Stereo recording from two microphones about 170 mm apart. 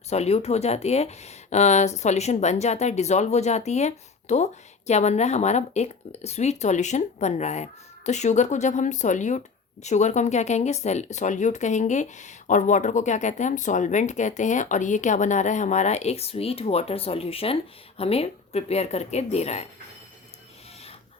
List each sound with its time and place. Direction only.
0.1 s speech: 40° left (ahead or behind)